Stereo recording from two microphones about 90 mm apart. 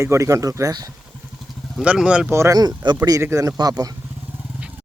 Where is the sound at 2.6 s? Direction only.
50° right (ahead or behind).